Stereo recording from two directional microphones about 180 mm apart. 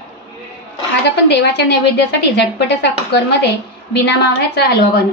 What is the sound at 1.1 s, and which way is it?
A woman's voice, 70° left (ahead or behind).